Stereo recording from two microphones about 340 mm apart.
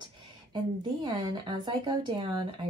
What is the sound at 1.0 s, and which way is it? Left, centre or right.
Speech, centre.